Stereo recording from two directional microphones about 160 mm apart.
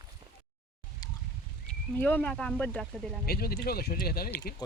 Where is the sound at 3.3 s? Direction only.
75° left (ahead or behind).